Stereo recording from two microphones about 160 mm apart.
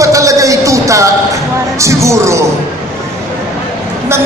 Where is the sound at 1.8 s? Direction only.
20° right (ahead or behind).